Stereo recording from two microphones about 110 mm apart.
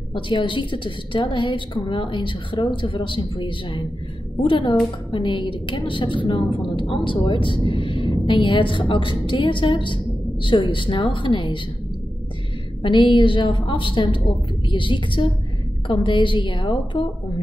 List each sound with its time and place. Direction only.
0.1 s a woman's voice: 45° left (ahead or behind)
12.8 s a woman's voice: 45° left (ahead or behind)